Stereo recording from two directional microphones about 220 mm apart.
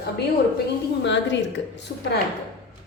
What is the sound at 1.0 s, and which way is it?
Speech, 55° left (ahead or behind).